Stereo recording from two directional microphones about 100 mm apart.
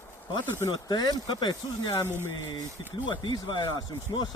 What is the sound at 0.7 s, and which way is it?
Speech, 45° left (ahead or behind).